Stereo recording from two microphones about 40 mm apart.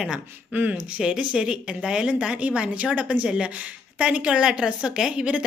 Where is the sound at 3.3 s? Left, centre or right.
Right.